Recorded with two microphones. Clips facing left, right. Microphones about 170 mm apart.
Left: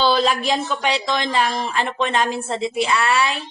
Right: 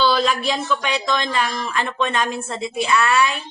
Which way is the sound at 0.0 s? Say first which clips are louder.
Left 1 dB; 35° left (ahead or behind).